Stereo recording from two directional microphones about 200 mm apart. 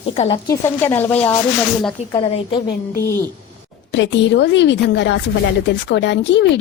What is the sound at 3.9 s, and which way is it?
Speech, 65° left (ahead or behind).